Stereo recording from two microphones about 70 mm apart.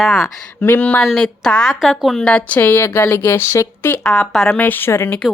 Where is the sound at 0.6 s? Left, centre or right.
Left.